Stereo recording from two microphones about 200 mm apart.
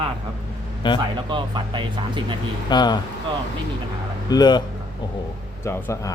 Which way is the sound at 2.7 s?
20° left (ahead or behind).